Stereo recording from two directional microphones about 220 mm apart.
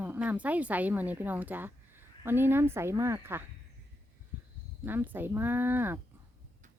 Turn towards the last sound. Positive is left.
turn(degrees=-10)  # may be behind; listen again after turning